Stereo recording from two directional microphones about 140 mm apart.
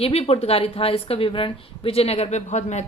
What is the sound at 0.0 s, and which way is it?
A woman's voice, 45° left (ahead or behind).